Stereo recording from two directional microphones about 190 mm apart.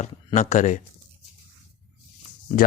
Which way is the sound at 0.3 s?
40° left (ahead or behind).